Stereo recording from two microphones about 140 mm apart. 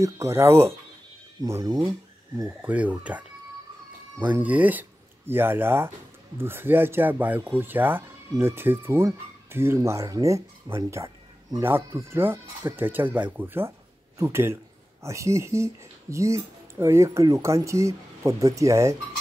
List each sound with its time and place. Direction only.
0.0 s speech: 20° right (ahead or behind)
2.6 s speech: 10° right (ahead or behind)